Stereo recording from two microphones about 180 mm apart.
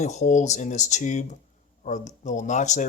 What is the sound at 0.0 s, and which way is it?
Speech, 40° left (ahead or behind).